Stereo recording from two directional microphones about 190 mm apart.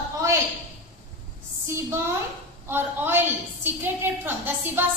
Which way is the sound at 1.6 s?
15° right (ahead or behind).